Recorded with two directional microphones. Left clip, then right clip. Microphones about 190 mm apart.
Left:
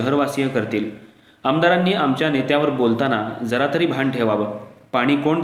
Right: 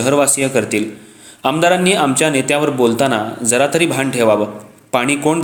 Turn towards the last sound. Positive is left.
turn(degrees=-45)  # may be behind; listen again after turning